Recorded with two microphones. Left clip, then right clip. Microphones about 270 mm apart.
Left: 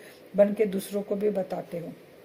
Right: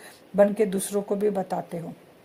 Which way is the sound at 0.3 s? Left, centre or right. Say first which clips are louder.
Right 2 dB; right.